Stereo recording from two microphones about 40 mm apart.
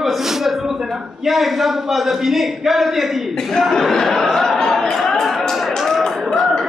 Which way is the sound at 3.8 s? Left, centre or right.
Centre.